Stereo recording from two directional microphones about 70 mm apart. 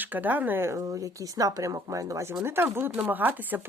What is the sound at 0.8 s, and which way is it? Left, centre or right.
Speech, right.